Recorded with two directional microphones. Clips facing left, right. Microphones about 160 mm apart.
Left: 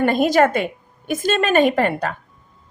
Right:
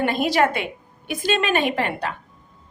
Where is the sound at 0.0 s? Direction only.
45° left (ahead or behind).